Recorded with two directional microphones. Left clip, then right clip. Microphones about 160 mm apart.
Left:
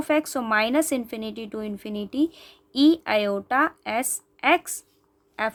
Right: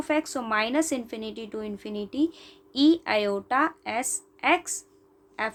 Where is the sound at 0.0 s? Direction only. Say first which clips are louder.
Left 3 dB; 45° left (ahead or behind).